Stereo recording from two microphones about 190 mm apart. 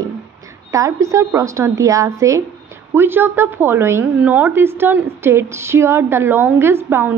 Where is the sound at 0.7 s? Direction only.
15° right (ahead or behind).